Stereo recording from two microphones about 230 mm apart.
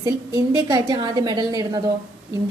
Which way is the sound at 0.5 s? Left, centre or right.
Centre.